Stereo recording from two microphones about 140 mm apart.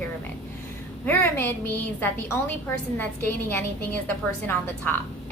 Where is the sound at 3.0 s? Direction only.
15° left (ahead or behind).